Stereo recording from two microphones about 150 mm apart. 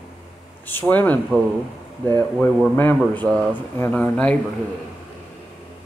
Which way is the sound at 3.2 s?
5° left (ahead or behind).